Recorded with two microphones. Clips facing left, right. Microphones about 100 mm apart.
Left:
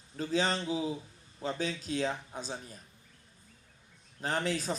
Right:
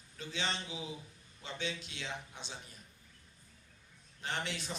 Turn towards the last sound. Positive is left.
turn(degrees=40)  # may be behind; listen again after turning